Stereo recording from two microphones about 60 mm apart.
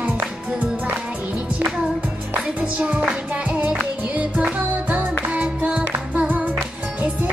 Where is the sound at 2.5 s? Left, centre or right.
Centre.